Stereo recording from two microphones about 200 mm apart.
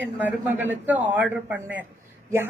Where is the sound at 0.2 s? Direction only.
10° right (ahead or behind).